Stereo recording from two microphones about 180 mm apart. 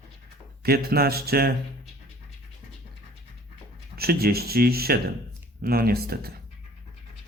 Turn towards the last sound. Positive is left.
turn(degrees=-55)  # may be behind; listen again after turning